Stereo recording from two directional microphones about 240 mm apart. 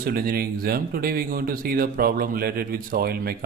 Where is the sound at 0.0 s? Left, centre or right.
Right.